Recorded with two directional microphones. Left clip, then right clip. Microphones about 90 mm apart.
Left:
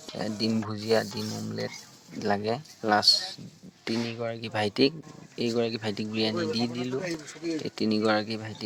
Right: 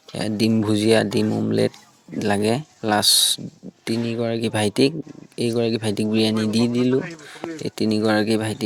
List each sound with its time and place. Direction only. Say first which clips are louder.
0.1 s speech: right 8 dB; 40° right (ahead or behind)